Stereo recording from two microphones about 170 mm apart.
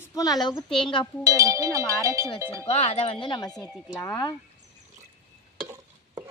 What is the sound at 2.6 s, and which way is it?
A woman's voice, 35° left (ahead or behind).